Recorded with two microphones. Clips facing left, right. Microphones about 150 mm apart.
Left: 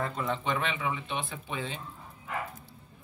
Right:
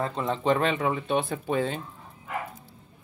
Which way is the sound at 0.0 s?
25° right (ahead or behind).